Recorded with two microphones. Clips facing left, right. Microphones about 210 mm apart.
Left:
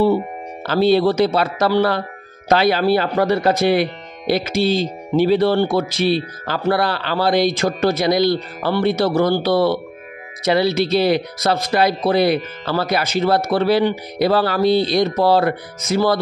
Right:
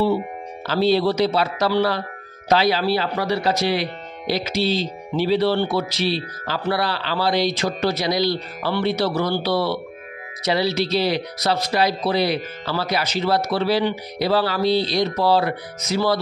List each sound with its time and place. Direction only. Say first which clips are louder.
0.7 s speech: left 4 dB; 55° left (ahead or behind)